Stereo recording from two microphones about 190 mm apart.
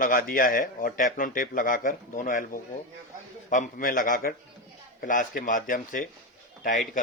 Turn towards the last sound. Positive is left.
turn(degrees=45)  # may be behind; listen again after turning